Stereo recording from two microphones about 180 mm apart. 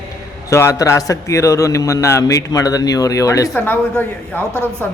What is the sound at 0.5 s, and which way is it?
A man's voice, 15° left (ahead or behind).